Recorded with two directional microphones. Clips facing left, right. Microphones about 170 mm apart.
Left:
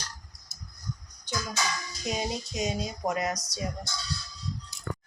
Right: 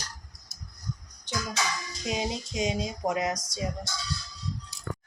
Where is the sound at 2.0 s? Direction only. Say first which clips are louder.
Right 1 dB; 20° right (ahead or behind).